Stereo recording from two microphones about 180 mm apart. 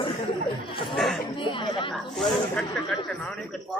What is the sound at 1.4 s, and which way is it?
Chatter, 30° left (ahead or behind).